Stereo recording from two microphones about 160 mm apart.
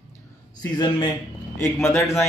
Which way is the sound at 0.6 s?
25° left (ahead or behind).